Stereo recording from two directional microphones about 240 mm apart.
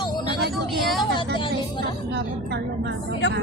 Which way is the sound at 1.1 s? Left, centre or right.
Centre.